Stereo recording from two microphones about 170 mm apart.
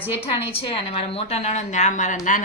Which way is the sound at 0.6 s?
35° left (ahead or behind).